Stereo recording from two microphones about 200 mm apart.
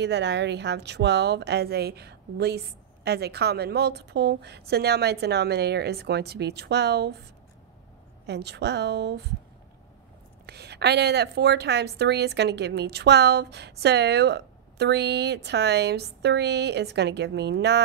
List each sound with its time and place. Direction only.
0.0 s a woman's voice: 60° right (ahead or behind)
8.3 s a woman's voice: 60° right (ahead or behind)
10.4 s a woman's voice: 55° right (ahead or behind)